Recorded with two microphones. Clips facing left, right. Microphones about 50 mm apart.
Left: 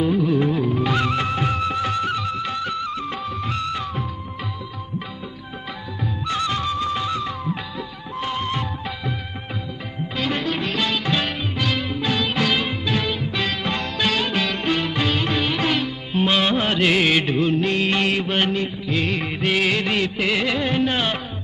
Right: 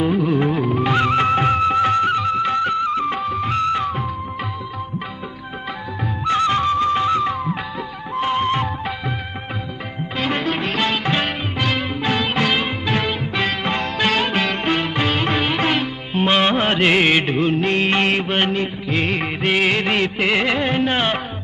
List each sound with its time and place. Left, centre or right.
0.0 s music: right
6.2 s music: right
10.2 s music: right